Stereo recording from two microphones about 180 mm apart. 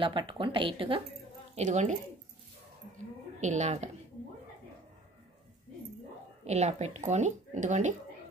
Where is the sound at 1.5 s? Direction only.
40° right (ahead or behind).